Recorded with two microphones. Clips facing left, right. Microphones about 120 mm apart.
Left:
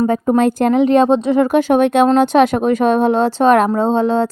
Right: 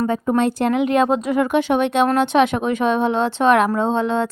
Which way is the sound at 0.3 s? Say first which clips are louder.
Left 5 dB; 45° left (ahead or behind).